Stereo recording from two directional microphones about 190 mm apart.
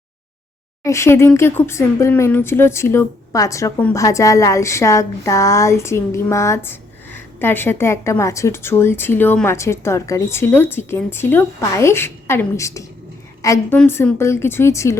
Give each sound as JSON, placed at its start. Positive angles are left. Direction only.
{"t": 0.9, "sound": "speech", "side_deg": 15}